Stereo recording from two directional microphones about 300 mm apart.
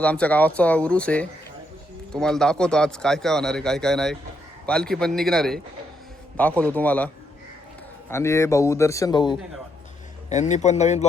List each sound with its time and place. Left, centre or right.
0.0 s a man's voice: centre
8.1 s a man's voice: centre